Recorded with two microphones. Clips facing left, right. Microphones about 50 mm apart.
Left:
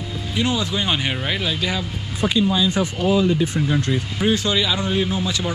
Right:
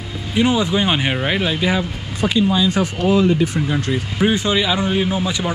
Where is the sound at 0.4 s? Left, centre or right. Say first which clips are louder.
Right 6 dB; right.